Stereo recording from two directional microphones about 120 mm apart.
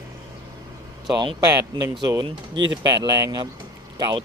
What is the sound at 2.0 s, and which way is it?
Speech, 40° right (ahead or behind).